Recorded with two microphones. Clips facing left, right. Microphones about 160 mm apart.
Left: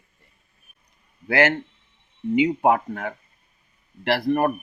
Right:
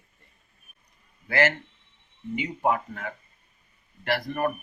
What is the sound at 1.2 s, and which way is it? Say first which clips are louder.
Speech: left 4 dB; 60° left (ahead or behind).